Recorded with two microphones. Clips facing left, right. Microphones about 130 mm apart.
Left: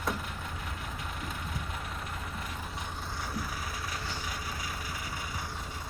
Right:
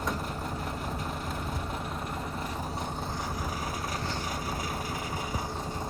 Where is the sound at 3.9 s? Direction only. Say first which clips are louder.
Right 5 dB; 45° right (ahead or behind).